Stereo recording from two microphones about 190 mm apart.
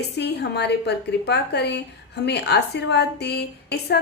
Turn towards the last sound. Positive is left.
turn(degrees=60)  # may be behind; listen again after turning